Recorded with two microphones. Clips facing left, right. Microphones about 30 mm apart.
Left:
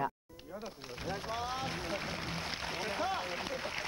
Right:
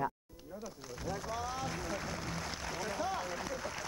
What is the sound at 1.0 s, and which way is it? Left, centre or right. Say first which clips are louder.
Speech: left 1 dB; left.